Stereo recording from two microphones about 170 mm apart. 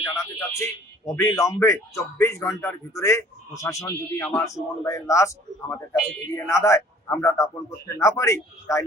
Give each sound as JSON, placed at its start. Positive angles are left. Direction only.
{"t": 0.3, "sound": "a man's voice", "side_deg": 20}